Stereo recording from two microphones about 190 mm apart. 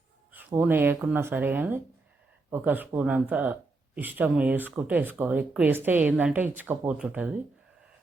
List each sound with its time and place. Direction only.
0.3 s speech: 10° right (ahead or behind)